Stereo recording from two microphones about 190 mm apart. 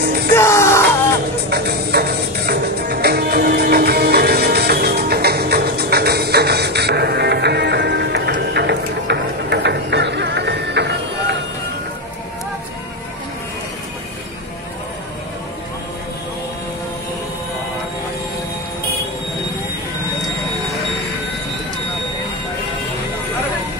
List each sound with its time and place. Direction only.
0.0 s music: 55° right (ahead or behind)
0.3 s music: 15° left (ahead or behind)
1.5 s music: 55° right (ahead or behind)